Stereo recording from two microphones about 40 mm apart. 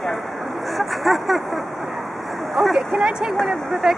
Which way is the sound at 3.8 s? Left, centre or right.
Centre.